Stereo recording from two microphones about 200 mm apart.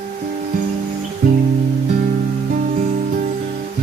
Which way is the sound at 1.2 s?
45° right (ahead or behind).